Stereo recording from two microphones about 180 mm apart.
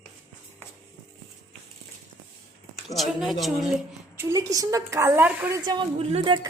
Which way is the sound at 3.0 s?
Centre (ahead or behind).